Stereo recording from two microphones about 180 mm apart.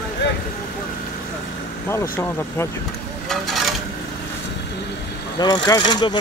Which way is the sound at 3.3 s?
Centre (ahead or behind).